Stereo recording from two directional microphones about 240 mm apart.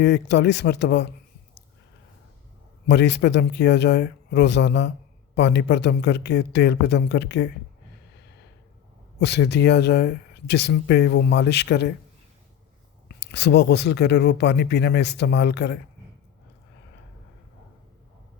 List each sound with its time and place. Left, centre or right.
0.0 s speech: left
2.8 s speech: left
9.2 s speech: left
13.1 s speech: left